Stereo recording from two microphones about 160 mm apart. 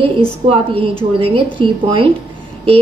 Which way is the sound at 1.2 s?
30° right (ahead or behind).